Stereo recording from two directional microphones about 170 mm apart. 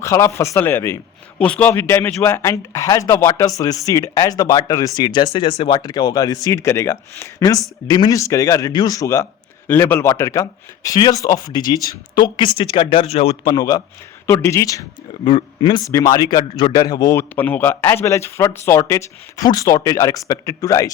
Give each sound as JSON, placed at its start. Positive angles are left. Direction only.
{"t": 0.0, "sound": "a man's voice", "side_deg": 15}
{"t": 15.3, "sound": "a man's voice", "side_deg": 30}